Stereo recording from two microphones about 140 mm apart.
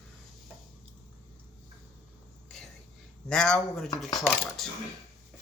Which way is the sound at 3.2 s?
5° left (ahead or behind).